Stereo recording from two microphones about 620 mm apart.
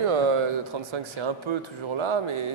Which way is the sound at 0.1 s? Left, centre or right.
Right.